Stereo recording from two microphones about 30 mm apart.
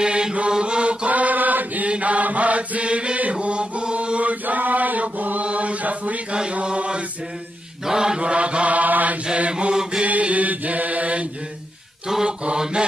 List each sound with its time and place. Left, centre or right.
0.0 s mantra: right
1.0 s chant: right
1.9 s mantra: right
3.3 s chant: right
4.2 s chant: right
4.6 s chant: right
5.4 s chant: right
7.8 s mantra: right
8.2 s chant: right
8.7 s mantra: right
9.5 s chant: right
10.0 s mantra: right
12.1 s mantra: centre